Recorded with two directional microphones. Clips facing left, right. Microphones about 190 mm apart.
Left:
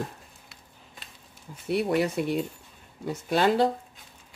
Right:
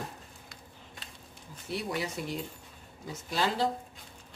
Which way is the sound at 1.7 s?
60° left (ahead or behind).